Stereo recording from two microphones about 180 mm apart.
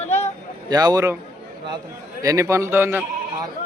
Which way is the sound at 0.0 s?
35° left (ahead or behind).